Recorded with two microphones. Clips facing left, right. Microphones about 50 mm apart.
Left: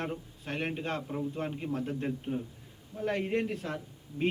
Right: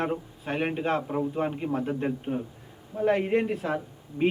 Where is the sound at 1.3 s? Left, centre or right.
Centre.